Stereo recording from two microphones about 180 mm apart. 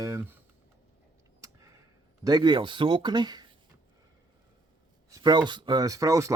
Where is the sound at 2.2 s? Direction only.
20° right (ahead or behind).